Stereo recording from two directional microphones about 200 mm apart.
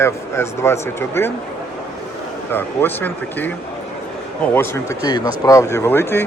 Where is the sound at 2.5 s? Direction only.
10° left (ahead or behind).